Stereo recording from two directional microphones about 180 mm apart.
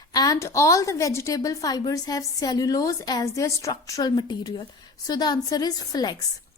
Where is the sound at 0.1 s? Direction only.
20° left (ahead or behind).